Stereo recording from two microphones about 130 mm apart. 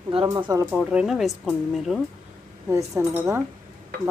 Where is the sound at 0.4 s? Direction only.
25° right (ahead or behind).